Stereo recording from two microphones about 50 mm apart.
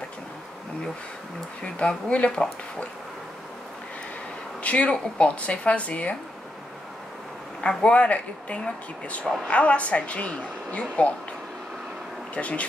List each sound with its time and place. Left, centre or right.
1.6 s a woman's voice: left
4.6 s a woman's voice: left
7.6 s a woman's voice: centre
12.4 s a woman's voice: left